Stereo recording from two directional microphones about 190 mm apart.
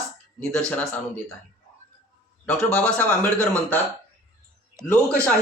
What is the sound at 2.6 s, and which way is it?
Speech, 5° left (ahead or behind).